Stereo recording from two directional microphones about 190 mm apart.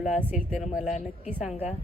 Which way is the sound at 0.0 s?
10° right (ahead or behind).